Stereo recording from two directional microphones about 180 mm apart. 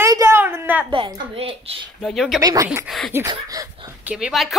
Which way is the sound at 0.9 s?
30° right (ahead or behind).